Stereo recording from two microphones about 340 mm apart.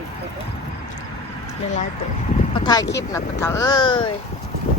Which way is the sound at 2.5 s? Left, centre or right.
Centre.